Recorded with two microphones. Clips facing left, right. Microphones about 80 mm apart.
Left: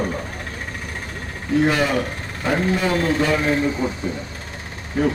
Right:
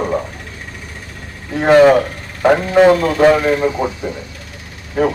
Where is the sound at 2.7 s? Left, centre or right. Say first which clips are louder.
Right 10 dB; right.